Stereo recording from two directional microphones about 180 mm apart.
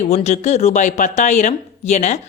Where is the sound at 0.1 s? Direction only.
40° left (ahead or behind).